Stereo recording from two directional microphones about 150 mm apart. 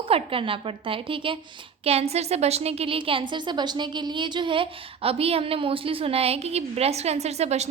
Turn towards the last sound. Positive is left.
turn(degrees=-45)  # may be behind; listen again after turning